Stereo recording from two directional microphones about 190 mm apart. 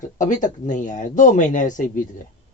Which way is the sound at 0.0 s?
40° left (ahead or behind).